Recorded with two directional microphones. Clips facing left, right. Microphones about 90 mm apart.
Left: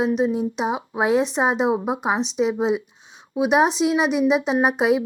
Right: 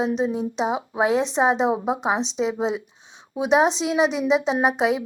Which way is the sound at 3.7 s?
30° right (ahead or behind).